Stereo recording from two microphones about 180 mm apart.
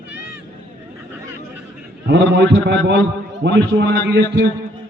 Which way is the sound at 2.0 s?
75° right (ahead or behind).